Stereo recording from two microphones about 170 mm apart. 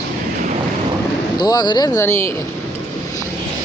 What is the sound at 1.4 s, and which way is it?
Speech, 25° left (ahead or behind).